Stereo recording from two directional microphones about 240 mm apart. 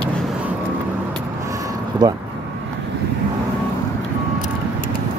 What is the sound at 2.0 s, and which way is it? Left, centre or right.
Speech, centre.